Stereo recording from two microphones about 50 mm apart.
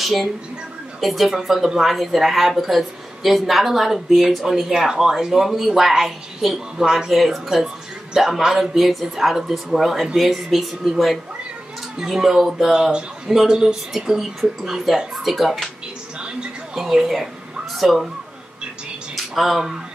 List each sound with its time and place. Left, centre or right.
0.0 s speech: centre
16.2 s music: centre
16.8 s a woman's voice: centre
19.1 s a sound: centre